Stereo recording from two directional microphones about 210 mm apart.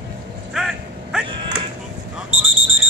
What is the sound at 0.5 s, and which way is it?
Dog, centre (ahead or behind).